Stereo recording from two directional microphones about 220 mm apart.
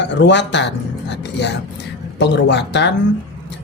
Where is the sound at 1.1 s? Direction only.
50° left (ahead or behind).